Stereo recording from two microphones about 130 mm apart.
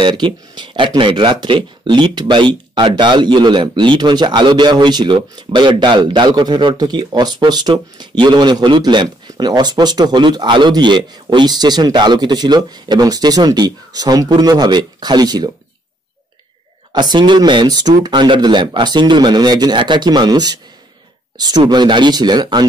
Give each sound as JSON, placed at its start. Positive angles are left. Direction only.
{"t": 0.0, "sound": "speech", "side_deg": -35}
{"t": 16.9, "sound": "speech", "side_deg": -35}